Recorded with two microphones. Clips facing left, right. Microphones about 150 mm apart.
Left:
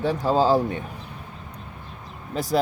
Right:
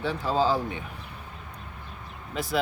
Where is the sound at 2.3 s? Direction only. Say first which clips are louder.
Left 5 dB; 40° left (ahead or behind).